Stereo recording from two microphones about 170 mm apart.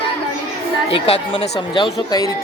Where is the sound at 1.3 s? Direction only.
30° left (ahead or behind).